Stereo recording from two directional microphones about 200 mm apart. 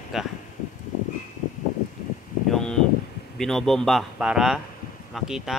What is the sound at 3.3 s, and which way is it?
Speech, centre (ahead or behind).